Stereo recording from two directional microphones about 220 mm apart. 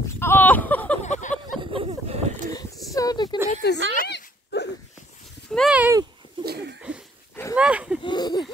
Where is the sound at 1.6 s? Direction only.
25° right (ahead or behind).